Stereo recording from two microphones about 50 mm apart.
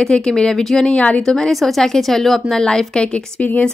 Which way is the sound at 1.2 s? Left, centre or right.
Centre.